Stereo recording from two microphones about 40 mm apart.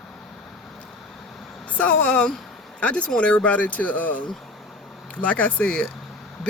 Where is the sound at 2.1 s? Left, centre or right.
Left.